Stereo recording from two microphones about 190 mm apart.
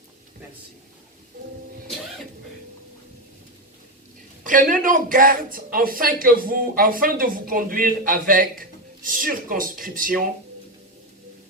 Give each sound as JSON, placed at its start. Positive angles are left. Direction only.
{"t": 4.4, "sound": "speech", "side_deg": -45}